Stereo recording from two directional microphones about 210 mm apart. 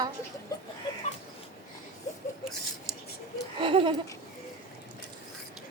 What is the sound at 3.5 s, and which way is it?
Speech, 25° right (ahead or behind).